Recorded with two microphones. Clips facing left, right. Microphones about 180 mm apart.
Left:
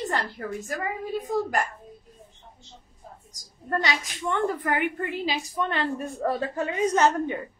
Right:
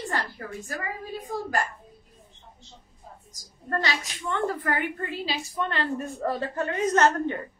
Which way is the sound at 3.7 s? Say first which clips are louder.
Left 2 dB; 15° left (ahead or behind).